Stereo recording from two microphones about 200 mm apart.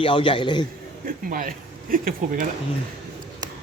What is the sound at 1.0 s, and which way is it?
Speech, 45° right (ahead or behind).